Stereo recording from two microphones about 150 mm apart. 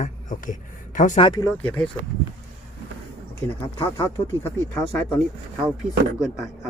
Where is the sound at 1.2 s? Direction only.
35° left (ahead or behind).